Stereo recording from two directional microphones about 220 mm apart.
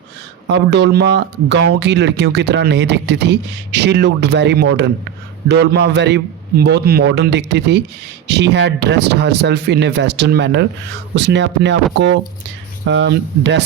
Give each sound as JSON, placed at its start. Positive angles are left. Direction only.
{"t": 0.4, "sound": "speech", "side_deg": -50}
{"t": 12.9, "sound": "speech", "side_deg": -55}